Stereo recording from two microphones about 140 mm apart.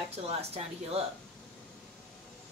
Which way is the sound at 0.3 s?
45° right (ahead or behind).